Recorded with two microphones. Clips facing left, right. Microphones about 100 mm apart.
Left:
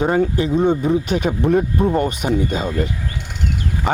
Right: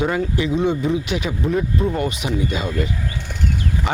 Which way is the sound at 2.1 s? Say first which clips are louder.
Left 3 dB; 45° left (ahead or behind).